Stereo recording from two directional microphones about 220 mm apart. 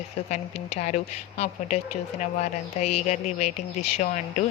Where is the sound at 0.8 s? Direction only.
30° left (ahead or behind).